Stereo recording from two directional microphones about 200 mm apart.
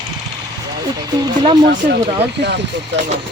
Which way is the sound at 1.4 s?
25° right (ahead or behind).